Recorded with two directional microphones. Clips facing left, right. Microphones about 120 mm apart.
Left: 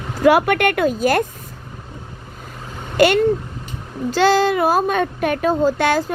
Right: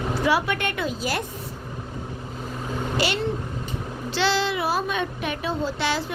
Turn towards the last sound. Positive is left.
turn(degrees=50)  # may be behind; listen again after turning